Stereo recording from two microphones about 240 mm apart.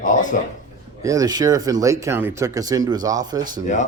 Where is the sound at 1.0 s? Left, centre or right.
Centre.